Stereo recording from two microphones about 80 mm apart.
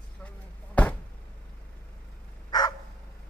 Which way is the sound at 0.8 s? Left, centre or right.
Centre.